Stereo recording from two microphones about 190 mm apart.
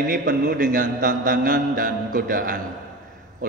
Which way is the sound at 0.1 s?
45° right (ahead or behind).